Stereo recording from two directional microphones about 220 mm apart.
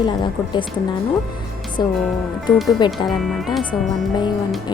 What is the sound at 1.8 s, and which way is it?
Speech, 20° left (ahead or behind).